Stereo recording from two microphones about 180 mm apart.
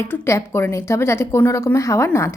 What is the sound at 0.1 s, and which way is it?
A woman's voice, 15° left (ahead or behind).